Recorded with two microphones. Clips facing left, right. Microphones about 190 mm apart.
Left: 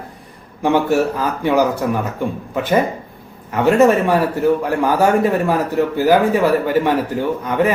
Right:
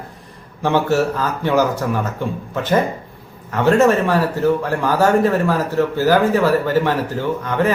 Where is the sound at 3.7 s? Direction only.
15° left (ahead or behind).